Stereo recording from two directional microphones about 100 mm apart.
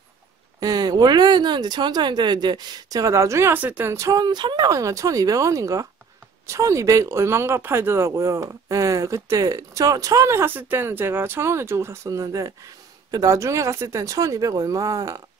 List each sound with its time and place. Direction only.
0.6 s speech: 40° right (ahead or behind)
3.5 s speech: 15° right (ahead or behind)
3.9 s speech: 35° right (ahead or behind)
4.6 s speech: 35° right (ahead or behind)